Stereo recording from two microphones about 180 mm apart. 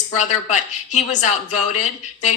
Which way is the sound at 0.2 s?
40° left (ahead or behind).